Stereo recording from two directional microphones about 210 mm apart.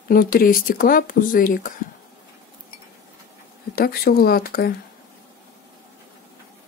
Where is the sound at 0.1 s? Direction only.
45° left (ahead or behind).